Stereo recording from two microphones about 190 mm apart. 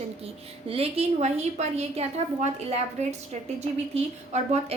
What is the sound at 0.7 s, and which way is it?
A woman's voice, 30° right (ahead or behind).